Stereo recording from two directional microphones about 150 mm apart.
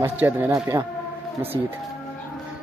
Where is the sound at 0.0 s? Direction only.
15° right (ahead or behind).